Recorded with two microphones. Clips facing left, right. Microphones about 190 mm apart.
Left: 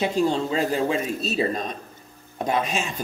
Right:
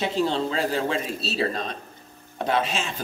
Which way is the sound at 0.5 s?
15° left (ahead or behind).